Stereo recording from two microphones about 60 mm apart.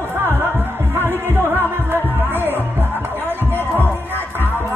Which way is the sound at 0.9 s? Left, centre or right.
Right.